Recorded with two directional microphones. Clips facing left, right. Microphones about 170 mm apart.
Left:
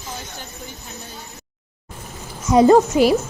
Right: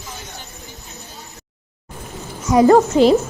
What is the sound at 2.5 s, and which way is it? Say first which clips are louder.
Speech: right 1 dB; 20° left (ahead or behind).